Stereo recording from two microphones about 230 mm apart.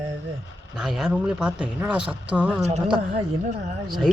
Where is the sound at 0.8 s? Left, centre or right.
Centre.